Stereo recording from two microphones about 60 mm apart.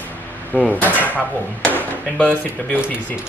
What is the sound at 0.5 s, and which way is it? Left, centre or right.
Speech, left.